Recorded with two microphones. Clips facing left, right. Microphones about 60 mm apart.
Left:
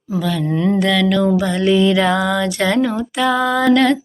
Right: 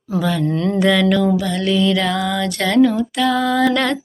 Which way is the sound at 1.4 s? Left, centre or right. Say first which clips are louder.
Left 3 dB; centre.